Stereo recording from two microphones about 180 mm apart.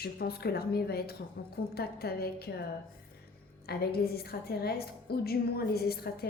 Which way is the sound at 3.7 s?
60° left (ahead or behind).